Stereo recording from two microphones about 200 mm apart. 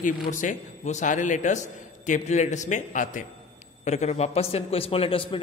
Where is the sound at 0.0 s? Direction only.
40° left (ahead or behind).